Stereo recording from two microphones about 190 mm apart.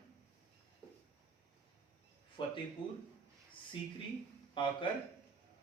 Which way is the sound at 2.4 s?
25° left (ahead or behind).